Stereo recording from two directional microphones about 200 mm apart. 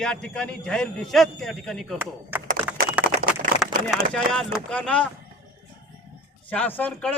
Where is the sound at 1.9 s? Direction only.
10° right (ahead or behind).